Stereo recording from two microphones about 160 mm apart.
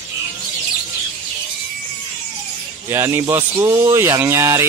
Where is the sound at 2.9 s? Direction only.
15° right (ahead or behind).